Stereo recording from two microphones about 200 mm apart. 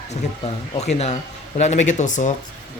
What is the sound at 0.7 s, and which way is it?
Speech, 35° left (ahead or behind).